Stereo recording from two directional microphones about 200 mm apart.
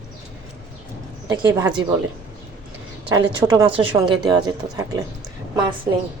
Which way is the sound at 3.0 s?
25° right (ahead or behind).